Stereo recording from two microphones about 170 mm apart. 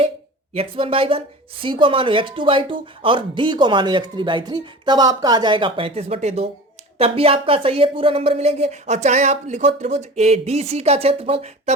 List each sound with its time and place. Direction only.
0.5 s speech: 35° right (ahead or behind)